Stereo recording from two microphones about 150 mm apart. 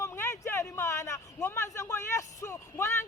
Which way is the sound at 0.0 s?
20° left (ahead or behind).